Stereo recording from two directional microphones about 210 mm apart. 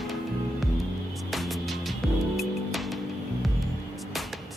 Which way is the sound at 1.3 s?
Centre (ahead or behind).